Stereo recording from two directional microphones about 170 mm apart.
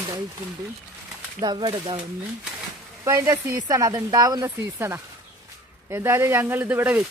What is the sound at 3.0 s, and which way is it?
Speech, 15° right (ahead or behind).